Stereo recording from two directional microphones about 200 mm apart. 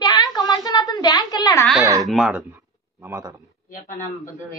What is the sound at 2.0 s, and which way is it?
Speech, 5° right (ahead or behind).